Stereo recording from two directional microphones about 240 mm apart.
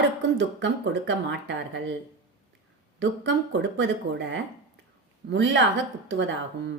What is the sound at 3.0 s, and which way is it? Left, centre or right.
Speech, right.